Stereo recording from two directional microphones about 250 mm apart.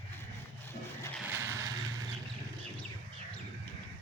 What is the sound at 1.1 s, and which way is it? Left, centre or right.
Vehicle, centre.